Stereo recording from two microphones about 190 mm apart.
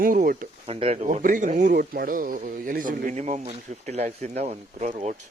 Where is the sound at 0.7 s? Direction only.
35° right (ahead or behind).